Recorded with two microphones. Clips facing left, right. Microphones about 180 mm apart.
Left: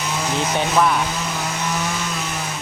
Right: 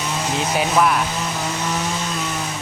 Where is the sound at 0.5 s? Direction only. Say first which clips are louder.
Right 1 dB; 5° right (ahead or behind).